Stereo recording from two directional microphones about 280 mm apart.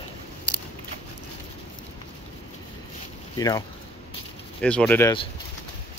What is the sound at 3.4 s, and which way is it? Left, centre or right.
Speech, centre.